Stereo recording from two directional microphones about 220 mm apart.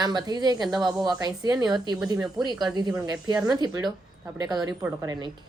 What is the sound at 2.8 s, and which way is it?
Speech, 20° right (ahead or behind).